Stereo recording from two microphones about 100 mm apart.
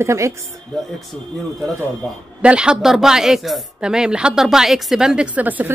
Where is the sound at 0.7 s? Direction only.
Centre (ahead or behind).